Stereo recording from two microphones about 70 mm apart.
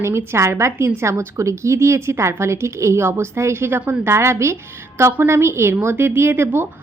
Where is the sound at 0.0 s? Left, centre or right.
Right.